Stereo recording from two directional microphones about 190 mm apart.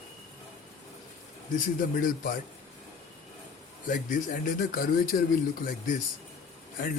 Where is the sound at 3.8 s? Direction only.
45° left (ahead or behind).